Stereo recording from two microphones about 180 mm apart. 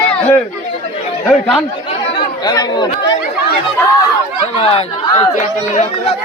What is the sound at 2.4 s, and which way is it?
Speech, 25° left (ahead or behind).